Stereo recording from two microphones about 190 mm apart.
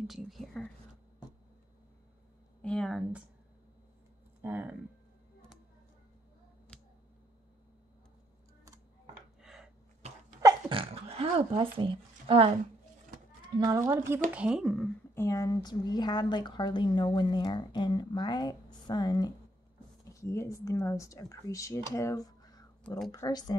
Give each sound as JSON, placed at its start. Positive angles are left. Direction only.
{"t": 0.0, "sound": "speech", "side_deg": 0}
{"t": 2.6, "sound": "speech", "side_deg": 5}
{"t": 4.4, "sound": "speech", "side_deg": -10}
{"t": 9.4, "sound": "a sound", "side_deg": -5}
{"t": 10.0, "sound": "a sound", "side_deg": -35}
{"t": 11.3, "sound": "speech", "side_deg": -30}
{"t": 13.7, "sound": "speech", "side_deg": -15}
{"t": 15.1, "sound": "speech", "side_deg": 15}